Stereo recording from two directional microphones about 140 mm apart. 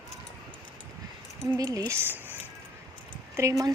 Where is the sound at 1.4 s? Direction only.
20° right (ahead or behind).